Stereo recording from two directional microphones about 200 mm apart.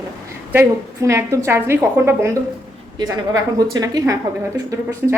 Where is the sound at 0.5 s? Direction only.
10° right (ahead or behind).